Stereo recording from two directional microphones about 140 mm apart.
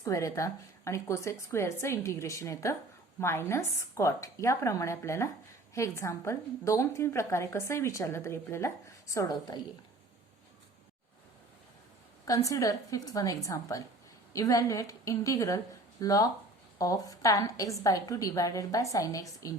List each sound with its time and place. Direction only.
0.0 s a woman's voice: 25° left (ahead or behind)
12.2 s a woman's voice: 25° left (ahead or behind)